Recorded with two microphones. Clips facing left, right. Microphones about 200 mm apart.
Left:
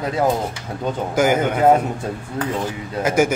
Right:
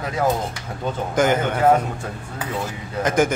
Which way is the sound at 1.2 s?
5° left (ahead or behind).